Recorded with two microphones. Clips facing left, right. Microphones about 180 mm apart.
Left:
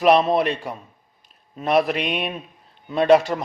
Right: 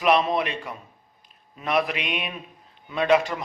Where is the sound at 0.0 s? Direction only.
35° left (ahead or behind).